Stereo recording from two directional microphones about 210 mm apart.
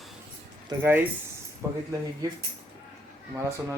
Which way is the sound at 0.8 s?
10° right (ahead or behind).